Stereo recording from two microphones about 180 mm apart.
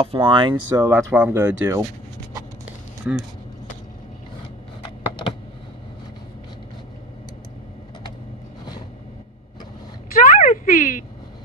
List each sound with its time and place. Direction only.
0.0 s speech: 30° right (ahead or behind)
3.1 s speech: 5° right (ahead or behind)
10.1 s a sound: 50° left (ahead or behind)